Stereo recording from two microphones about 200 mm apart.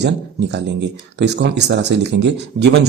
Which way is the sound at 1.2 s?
60° right (ahead or behind).